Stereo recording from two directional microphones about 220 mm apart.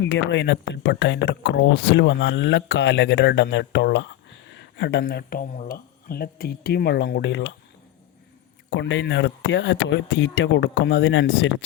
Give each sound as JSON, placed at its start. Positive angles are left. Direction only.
{"t": 0.0, "sound": "speech", "side_deg": 55}
{"t": 8.7, "sound": "speech", "side_deg": 55}